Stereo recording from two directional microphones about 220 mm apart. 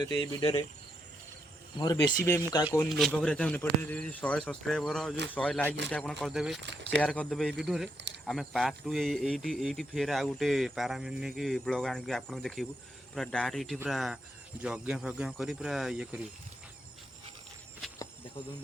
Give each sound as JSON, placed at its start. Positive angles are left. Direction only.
{"t": 0.0, "sound": "speech", "side_deg": 20}
{"t": 1.8, "sound": "speech", "side_deg": 20}
{"t": 2.9, "sound": "speech", "side_deg": 0}
{"t": 6.6, "sound": "speech", "side_deg": -50}
{"t": 7.0, "sound": "speech", "side_deg": 5}